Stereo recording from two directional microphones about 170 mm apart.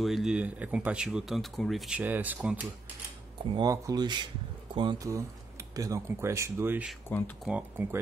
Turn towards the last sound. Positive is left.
turn(degrees=-10)  # may be behind; listen again after turning